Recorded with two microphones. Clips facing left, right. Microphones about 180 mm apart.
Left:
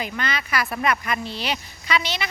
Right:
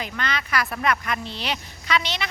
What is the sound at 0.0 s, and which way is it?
A woman's voice, 5° left (ahead or behind).